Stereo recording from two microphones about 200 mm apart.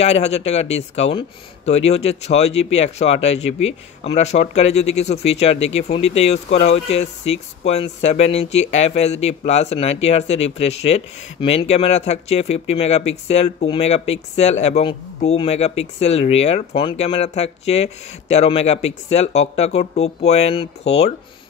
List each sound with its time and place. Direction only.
0.0 s speech: 35° left (ahead or behind)